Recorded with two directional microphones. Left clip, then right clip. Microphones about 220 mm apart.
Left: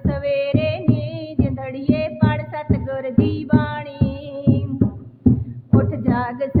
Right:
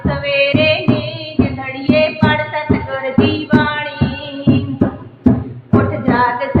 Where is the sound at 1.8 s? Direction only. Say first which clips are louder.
Right 8 dB; 50° left (ahead or behind).